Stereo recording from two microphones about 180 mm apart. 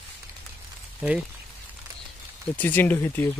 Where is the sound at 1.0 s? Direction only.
5° right (ahead or behind).